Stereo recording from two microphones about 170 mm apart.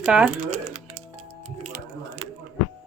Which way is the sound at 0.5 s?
40° right (ahead or behind).